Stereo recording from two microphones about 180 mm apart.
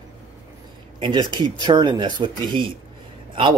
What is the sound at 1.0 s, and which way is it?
Speech, 25° right (ahead or behind).